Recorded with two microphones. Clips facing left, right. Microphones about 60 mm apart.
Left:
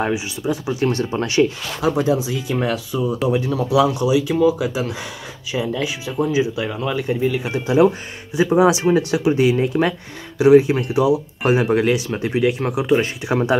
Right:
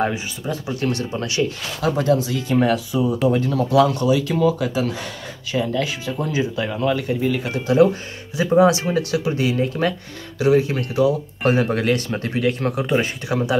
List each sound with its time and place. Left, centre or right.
0.0 s speech: centre
1.1 s speech: left
1.8 s speech: centre
7.0 s speech: left
13.3 s speech: left